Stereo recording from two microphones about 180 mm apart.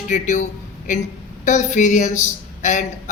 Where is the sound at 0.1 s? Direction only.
45° left (ahead or behind).